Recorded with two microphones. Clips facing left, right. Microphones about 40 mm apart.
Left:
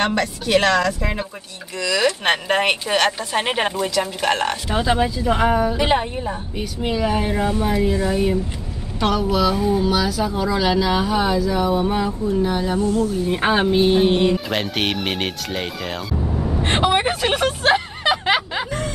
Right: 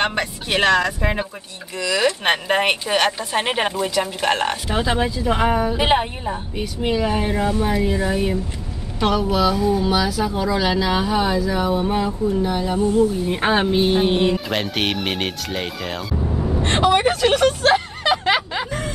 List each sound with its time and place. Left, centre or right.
0.0 s speech: centre
1.8 s speech: centre
9.6 s speech: centre
9.8 s speech: centre
12.8 s speech: centre
13.3 s speech: centre
16.6 s vehicle: centre